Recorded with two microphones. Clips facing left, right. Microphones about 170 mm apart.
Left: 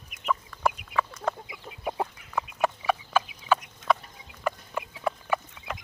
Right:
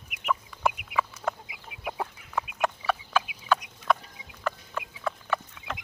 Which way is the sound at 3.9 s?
Centre (ahead or behind).